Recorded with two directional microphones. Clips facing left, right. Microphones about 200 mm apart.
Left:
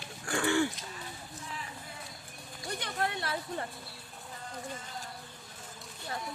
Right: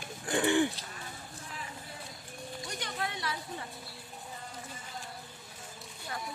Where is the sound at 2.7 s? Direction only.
55° left (ahead or behind).